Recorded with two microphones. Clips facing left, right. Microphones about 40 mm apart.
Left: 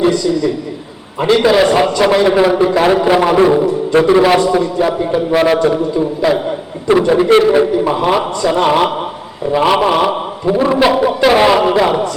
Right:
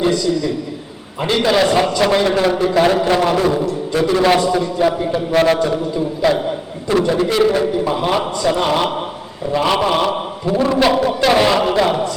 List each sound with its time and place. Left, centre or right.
0.0 s a man's voice: centre
4.2 s a man's voice: centre
6.9 s a man's voice: left
7.5 s a man's voice: centre